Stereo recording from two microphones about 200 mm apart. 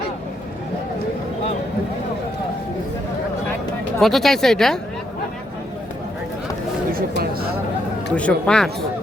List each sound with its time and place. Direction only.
4.0 s speech: centre (ahead or behind)
7.2 s chatter: 50° right (ahead or behind)
8.1 s speech: 5° left (ahead or behind)